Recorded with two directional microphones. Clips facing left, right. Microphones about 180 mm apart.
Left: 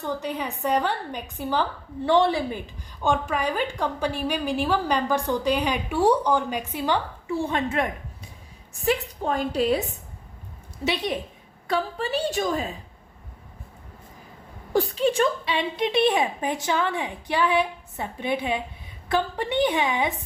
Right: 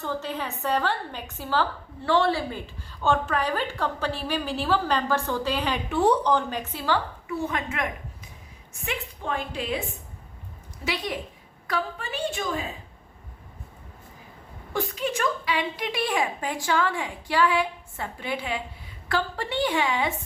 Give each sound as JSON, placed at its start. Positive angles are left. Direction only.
{"t": 0.0, "sound": "a woman's voice", "side_deg": 15}
{"t": 10.8, "sound": "a woman's voice", "side_deg": 25}
{"t": 14.7, "sound": "a woman's voice", "side_deg": 30}